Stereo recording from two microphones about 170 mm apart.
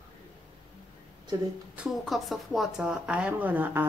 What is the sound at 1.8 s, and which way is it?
Speech, centre (ahead or behind).